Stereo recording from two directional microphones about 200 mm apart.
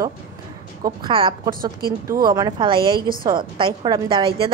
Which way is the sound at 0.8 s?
25° right (ahead or behind).